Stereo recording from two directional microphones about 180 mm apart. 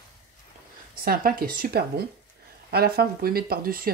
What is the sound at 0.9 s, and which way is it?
Speech, 55° right (ahead or behind).